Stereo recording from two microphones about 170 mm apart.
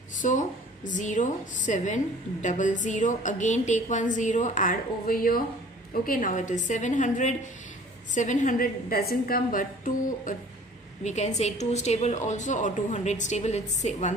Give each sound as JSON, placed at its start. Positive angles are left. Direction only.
{"t": 0.2, "sound": "a woman's voice", "side_deg": 50}
{"t": 11.1, "sound": "a woman's voice", "side_deg": 40}